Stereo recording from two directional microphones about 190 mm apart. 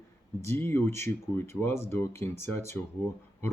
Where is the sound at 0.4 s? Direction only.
10° left (ahead or behind).